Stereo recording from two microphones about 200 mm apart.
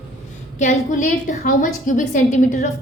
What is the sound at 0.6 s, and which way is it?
A woman's voice, 40° left (ahead or behind).